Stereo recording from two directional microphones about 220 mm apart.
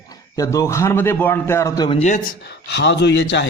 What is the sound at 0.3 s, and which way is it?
A man's voice, 15° left (ahead or behind).